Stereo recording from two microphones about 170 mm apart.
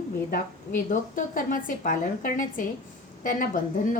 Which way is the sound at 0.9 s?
50° left (ahead or behind).